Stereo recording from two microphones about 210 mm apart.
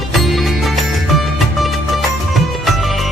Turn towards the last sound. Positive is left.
turn(degrees=0)  # may be behind; listen again after turning